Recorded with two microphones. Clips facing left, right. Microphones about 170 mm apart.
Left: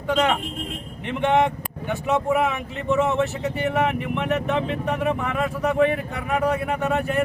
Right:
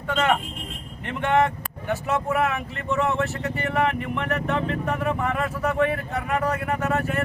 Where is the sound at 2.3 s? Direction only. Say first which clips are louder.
Left 1 dB; centre (ahead or behind).